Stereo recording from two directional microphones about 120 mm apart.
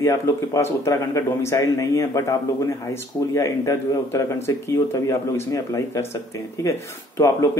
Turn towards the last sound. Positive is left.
turn(degrees=25)  # may be behind; listen again after turning